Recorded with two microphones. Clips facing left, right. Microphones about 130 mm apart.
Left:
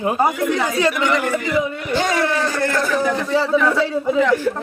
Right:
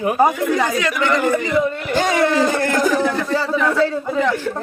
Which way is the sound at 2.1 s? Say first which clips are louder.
Right 3 dB; 20° right (ahead or behind).